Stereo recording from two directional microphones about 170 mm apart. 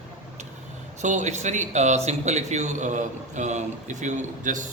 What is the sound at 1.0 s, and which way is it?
A man's voice, 45° right (ahead or behind).